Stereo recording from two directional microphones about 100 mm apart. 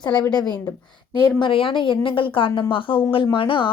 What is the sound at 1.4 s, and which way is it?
A woman's voice, 65° left (ahead or behind).